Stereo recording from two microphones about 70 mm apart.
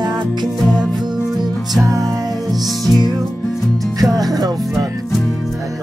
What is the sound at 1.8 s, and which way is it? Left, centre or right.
Music, right.